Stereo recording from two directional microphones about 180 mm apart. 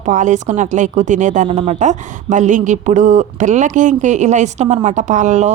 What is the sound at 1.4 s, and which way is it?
A woman's voice, 35° right (ahead or behind).